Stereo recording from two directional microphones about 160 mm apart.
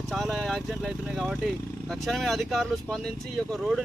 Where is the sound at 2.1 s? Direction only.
Centre (ahead or behind).